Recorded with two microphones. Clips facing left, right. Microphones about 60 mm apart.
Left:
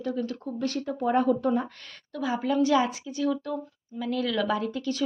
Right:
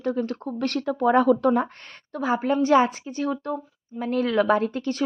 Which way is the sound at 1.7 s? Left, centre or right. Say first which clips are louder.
Right 4 dB; right.